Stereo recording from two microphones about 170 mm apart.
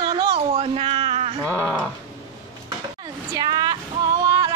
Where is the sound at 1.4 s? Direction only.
10° right (ahead or behind).